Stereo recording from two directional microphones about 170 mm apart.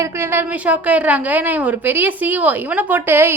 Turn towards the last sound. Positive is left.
turn(degrees=-15)  # may be behind; listen again after turning